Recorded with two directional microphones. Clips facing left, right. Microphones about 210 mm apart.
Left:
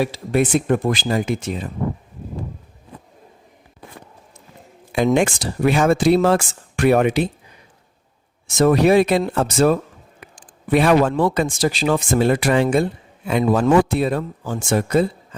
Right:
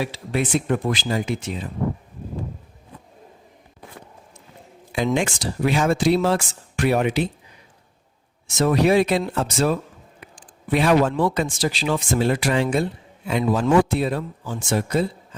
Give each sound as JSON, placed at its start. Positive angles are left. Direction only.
{"t": 0.0, "sound": "speech", "side_deg": 45}
{"t": 4.9, "sound": "speech", "side_deg": 55}
{"t": 8.5, "sound": "speech", "side_deg": 50}